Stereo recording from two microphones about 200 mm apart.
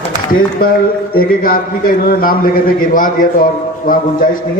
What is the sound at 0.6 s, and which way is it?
A man's voice, 50° left (ahead or behind).